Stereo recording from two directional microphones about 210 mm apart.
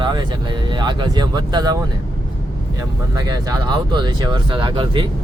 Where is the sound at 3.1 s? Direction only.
20° right (ahead or behind).